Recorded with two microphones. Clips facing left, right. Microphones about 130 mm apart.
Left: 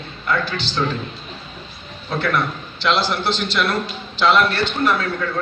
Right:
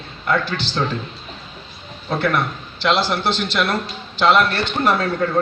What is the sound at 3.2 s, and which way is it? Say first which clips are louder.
Speech: right 1 dB; 55° right (ahead or behind).